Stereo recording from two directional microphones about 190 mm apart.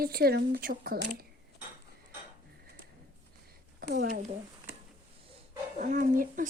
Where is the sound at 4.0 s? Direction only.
45° right (ahead or behind).